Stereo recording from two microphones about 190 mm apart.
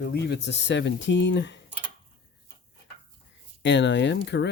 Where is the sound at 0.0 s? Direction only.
65° left (ahead or behind).